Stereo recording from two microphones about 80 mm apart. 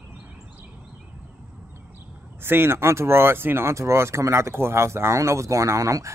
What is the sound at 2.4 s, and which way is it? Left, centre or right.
Speech, right.